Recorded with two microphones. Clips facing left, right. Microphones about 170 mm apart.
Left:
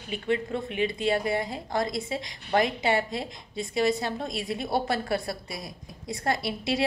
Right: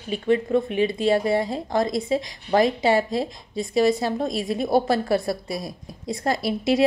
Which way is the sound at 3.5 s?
20° left (ahead or behind).